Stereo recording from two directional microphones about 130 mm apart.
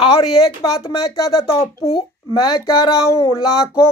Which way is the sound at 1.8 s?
40° left (ahead or behind).